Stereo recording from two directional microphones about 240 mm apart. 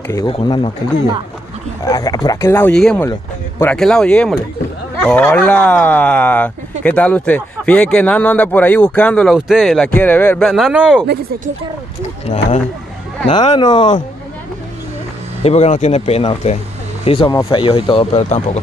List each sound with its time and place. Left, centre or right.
0.1 s speech: centre
1.9 s speech: centre
12.3 s speech: left
15.4 s speech: left